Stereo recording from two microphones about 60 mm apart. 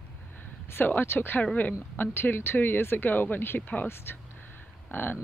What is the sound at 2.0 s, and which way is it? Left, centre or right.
Speech, left.